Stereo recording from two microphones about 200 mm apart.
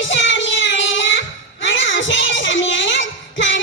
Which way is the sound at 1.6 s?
65° left (ahead or behind).